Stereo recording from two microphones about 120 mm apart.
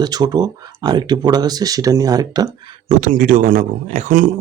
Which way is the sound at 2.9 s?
90° right.